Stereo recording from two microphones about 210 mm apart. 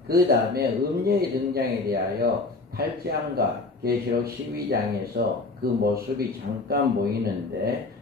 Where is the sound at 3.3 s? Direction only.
45° right (ahead or behind).